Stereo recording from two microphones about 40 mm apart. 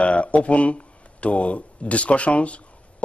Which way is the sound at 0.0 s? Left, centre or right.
Left.